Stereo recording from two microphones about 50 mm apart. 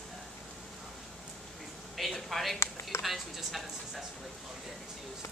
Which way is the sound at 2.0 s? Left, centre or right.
Centre.